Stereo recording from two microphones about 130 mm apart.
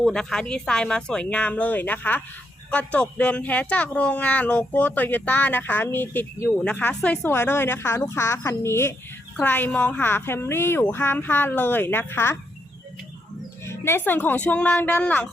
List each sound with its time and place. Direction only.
0.0 s speech: 5° left (ahead or behind)
13.7 s speech: 20° left (ahead or behind)